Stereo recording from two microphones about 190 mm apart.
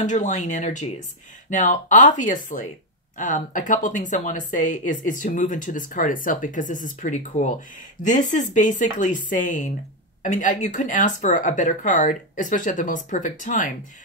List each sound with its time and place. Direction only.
0.0 s speech: 40° left (ahead or behind)